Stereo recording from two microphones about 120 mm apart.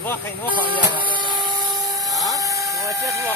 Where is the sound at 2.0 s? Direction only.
Centre (ahead or behind).